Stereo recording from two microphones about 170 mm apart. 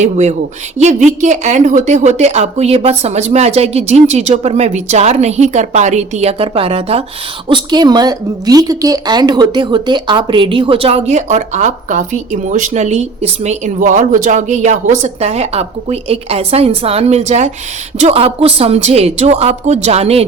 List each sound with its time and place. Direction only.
0.0 s a woman's voice: 45° right (ahead or behind)